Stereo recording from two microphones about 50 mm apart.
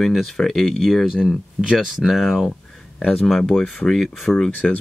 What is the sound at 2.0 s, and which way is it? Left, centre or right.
Speech, centre.